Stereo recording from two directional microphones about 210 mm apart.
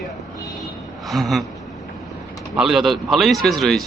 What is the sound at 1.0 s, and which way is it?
Speech, centre (ahead or behind).